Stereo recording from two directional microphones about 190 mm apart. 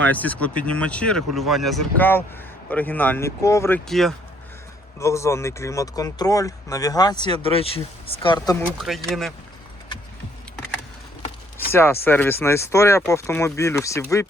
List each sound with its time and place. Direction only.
0.0 s speech: 10° left (ahead or behind)
3.8 s speech: centre (ahead or behind)
4.9 s speech: 15° left (ahead or behind)
8.6 s speech: centre (ahead or behind)
11.7 s speech: 10° left (ahead or behind)